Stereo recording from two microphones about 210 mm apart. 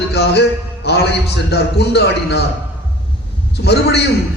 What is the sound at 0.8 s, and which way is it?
A man's voice, 50° left (ahead or behind).